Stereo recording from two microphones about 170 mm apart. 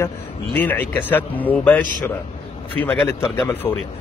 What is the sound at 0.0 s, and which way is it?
A man's voice, 10° left (ahead or behind).